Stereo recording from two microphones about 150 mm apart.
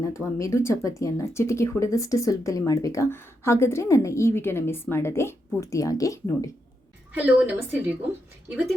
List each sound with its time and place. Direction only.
0.0 s speech: 20° left (ahead or behind)
7.1 s a woman's voice: 10° right (ahead or behind)